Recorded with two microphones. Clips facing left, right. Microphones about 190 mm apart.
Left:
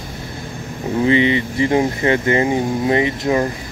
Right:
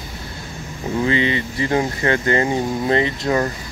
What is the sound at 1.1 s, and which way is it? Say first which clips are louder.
Speech: left 7 dB; 20° left (ahead or behind).